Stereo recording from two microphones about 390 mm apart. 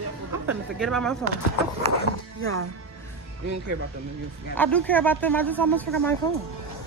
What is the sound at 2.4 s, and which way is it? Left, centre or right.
Speech, right.